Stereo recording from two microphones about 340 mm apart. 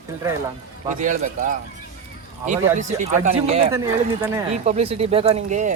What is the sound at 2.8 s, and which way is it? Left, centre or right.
Speech, right.